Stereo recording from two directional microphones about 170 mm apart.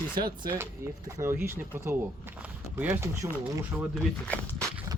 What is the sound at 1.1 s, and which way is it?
Speech, 15° right (ahead or behind).